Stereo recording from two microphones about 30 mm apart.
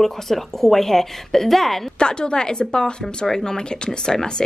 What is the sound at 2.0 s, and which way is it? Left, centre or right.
A woman's voice, left.